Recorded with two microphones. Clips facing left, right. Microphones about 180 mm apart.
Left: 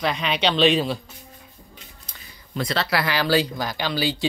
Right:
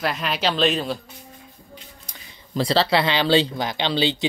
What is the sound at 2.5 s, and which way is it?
Speech, 30° right (ahead or behind).